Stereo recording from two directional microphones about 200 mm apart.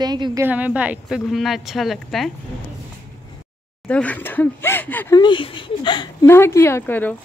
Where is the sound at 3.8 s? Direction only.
5° left (ahead or behind).